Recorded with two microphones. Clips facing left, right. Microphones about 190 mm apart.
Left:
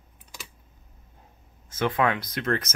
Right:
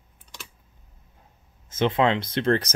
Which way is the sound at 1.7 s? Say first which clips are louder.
Right 3 dB; 20° right (ahead or behind).